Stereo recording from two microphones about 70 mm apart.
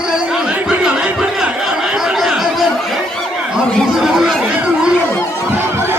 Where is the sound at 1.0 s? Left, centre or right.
Centre.